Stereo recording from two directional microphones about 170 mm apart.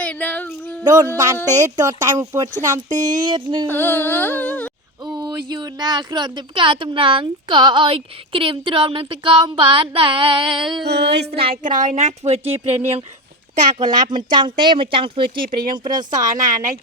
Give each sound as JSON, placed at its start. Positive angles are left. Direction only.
{"t": 0.0, "sound": "child singing", "side_deg": 10}
{"t": 0.9, "sound": "speech", "side_deg": -20}
{"t": 3.7, "sound": "a sound", "side_deg": 10}
{"t": 5.0, "sound": "speech", "side_deg": -25}
{"t": 10.8, "sound": "music", "side_deg": -80}
{"t": 11.3, "sound": "a woman's voice", "side_deg": -35}
{"t": 11.6, "sound": "a woman's voice", "side_deg": -50}
{"t": 13.8, "sound": "speech", "side_deg": -25}